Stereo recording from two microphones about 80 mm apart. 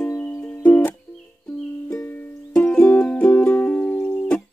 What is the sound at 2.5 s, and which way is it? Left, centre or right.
Music, centre.